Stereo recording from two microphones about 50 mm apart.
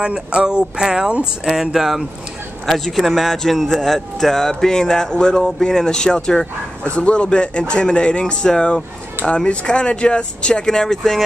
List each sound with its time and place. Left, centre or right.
0.0 s speech: centre
2.6 s speech: centre
6.8 s speech: left; by 11.2 s centre